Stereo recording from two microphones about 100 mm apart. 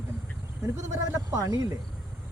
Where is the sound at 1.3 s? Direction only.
35° right (ahead or behind).